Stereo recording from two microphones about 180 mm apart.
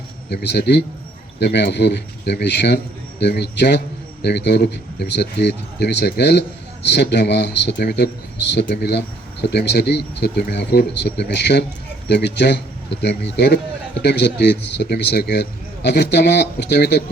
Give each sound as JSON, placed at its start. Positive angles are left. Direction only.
{"t": 0.3, "sound": "speech", "side_deg": 65}